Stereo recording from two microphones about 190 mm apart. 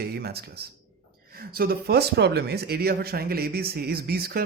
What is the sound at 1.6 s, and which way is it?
Speech, 55° right (ahead or behind).